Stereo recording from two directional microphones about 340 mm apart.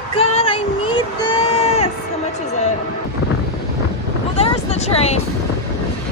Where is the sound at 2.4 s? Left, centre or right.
Centre.